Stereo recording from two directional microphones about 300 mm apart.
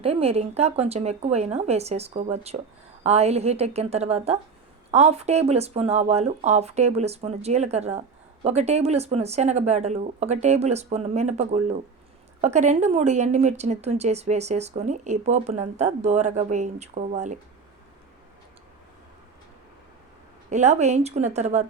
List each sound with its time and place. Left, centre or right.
0.0 s speech: centre
20.5 s speech: right